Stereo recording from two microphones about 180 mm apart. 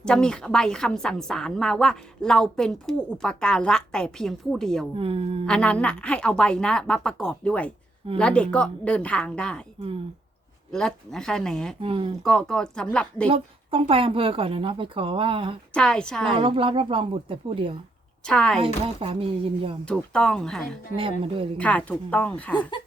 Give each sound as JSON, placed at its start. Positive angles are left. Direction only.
{"t": 0.0, "sound": "a woman's voice", "side_deg": 5}
{"t": 4.9, "sound": "speech", "side_deg": -30}
{"t": 5.5, "sound": "a woman's voice", "side_deg": 5}
{"t": 10.7, "sound": "a woman's voice", "side_deg": 5}
{"t": 11.8, "sound": "a woman's voice", "side_deg": -30}
{"t": 12.2, "sound": "a woman's voice", "side_deg": 5}
{"t": 13.2, "sound": "a woman's voice", "side_deg": -30}
{"t": 15.7, "sound": "a woman's voice", "side_deg": 5}
{"t": 16.3, "sound": "a woman's voice", "side_deg": -30}
{"t": 18.3, "sound": "a woman's voice", "side_deg": 5}
{"t": 18.6, "sound": "speech", "side_deg": -30}
{"t": 19.8, "sound": "a woman's voice", "side_deg": 5}
{"t": 20.9, "sound": "a woman's voice", "side_deg": -30}
{"t": 21.6, "sound": "a woman's voice", "side_deg": 5}